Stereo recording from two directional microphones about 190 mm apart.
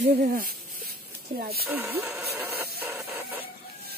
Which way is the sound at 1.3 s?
55° right (ahead or behind).